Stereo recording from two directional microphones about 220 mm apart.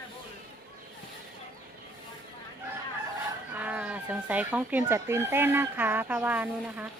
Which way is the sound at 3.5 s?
5° right (ahead or behind).